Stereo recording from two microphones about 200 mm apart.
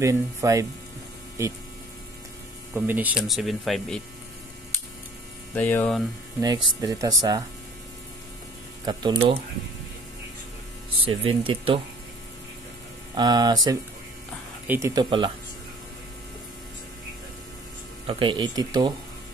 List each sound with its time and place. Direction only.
0.0 s speech: 15° right (ahead or behind)
2.7 s speech: 10° right (ahead or behind)
5.5 s speech: 10° left (ahead or behind)
6.4 s speech: 20° right (ahead or behind)
8.8 s speech: 25° right (ahead or behind)
11.0 s speech: 25° right (ahead or behind)
13.1 s speech: 20° right (ahead or behind)
14.7 s speech: 15° right (ahead or behind)
15.0 s speech: 25° right (ahead or behind)
18.0 s speech: 25° right (ahead or behind)